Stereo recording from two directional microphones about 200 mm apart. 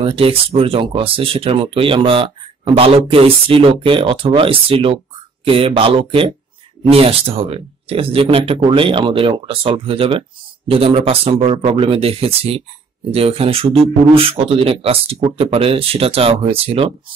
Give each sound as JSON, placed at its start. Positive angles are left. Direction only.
{"t": 0.0, "sound": "speech", "side_deg": -30}